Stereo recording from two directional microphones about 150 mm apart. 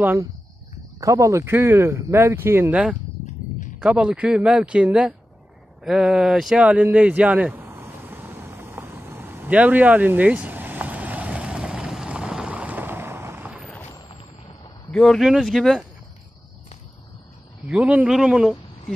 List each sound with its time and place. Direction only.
1.0 s speech: 20° right (ahead or behind)
3.8 s speech: 5° right (ahead or behind)
5.9 s a sound: 5° right (ahead or behind)
14.9 s speech: 5° left (ahead or behind)
17.6 s speech: 10° right (ahead or behind)